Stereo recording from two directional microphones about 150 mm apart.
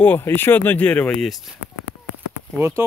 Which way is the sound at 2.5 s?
20° right (ahead or behind).